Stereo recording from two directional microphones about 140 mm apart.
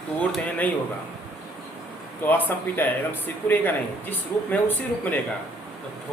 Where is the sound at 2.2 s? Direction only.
15° left (ahead or behind).